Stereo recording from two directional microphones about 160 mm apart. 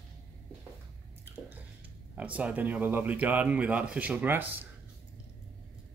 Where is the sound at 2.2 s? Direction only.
10° right (ahead or behind).